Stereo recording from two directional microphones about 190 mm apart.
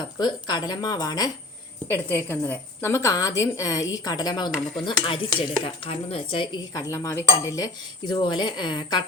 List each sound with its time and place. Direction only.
0.2 s a woman's voice: 25° left (ahead or behind)